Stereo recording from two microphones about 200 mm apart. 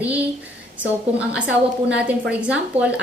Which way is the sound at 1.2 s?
5° right (ahead or behind).